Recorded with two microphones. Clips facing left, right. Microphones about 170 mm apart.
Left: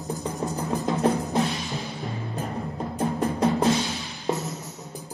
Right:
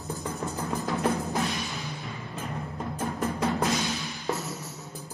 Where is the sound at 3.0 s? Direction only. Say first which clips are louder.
Left 5 dB; 30° left (ahead or behind).